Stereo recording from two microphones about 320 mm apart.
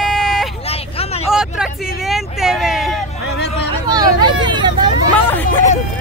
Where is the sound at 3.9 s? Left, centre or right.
Centre.